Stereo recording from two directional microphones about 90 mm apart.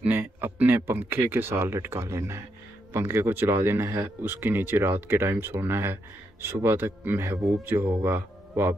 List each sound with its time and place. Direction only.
0.0 s speech: 20° right (ahead or behind)